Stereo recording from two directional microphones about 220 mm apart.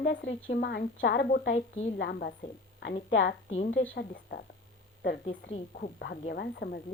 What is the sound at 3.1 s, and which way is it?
Speech, 55° left (ahead or behind).